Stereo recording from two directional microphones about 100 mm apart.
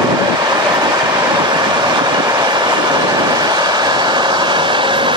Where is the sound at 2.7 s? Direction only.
40° right (ahead or behind).